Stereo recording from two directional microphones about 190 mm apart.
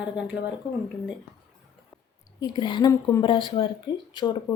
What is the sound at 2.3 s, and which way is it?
A woman's voice, 20° left (ahead or behind).